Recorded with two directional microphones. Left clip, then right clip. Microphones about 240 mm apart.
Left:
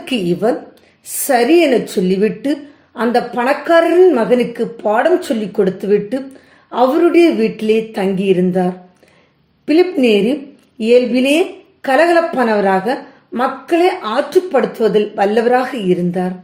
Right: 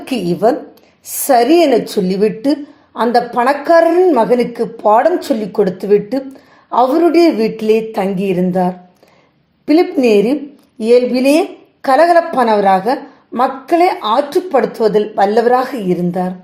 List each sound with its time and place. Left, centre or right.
0.0 s a woman's voice: centre